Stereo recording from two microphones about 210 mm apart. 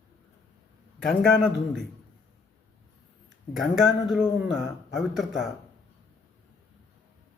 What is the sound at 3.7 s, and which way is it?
Speech, centre (ahead or behind).